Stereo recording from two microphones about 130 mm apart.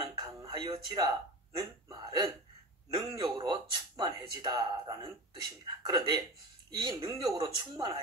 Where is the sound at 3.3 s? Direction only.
35° right (ahead or behind).